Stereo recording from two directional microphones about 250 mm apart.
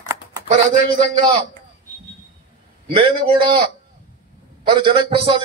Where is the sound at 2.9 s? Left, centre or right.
Centre.